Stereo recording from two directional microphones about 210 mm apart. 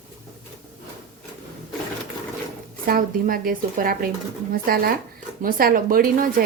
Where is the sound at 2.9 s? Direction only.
45° right (ahead or behind).